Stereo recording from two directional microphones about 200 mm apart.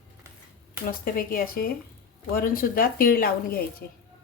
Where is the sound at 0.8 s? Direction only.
45° left (ahead or behind).